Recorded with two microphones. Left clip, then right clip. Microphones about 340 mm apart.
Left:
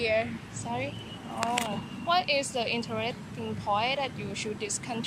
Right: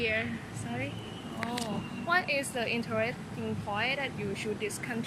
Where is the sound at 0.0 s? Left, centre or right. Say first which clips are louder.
Left 4 dB; centre.